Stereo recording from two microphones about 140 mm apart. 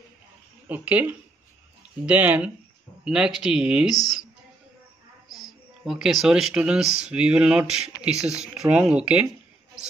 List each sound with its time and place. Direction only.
0.7 s speech: 10° right (ahead or behind)
3.9 s speech: 25° left (ahead or behind)
5.9 s speech: centre (ahead or behind)